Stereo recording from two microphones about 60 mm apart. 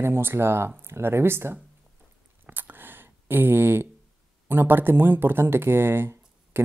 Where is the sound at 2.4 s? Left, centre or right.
Right.